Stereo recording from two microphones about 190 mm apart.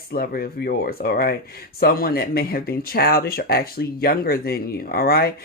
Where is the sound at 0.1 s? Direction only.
50° left (ahead or behind).